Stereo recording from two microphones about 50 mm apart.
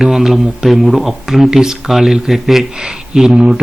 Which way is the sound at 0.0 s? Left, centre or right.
Centre.